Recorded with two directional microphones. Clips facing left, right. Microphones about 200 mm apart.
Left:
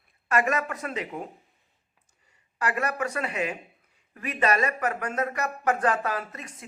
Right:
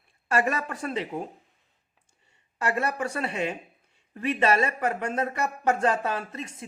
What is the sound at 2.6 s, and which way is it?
Speech, 25° right (ahead or behind).